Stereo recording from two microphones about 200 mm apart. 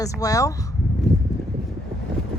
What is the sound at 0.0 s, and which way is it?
Speech, 15° left (ahead or behind).